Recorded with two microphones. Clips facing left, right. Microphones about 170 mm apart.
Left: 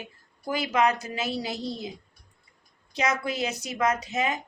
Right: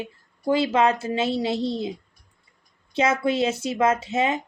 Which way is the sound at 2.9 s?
25° right (ahead or behind).